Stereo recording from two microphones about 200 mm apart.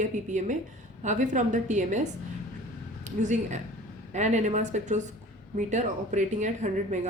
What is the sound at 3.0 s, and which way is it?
A woman's voice, 35° right (ahead or behind).